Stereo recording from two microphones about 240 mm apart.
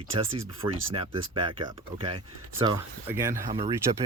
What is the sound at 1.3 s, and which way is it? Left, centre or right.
Speech, right.